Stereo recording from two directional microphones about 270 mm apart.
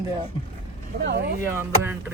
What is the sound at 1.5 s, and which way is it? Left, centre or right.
Speech, centre.